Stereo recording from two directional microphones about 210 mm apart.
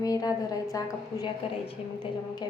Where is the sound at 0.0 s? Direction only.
15° left (ahead or behind).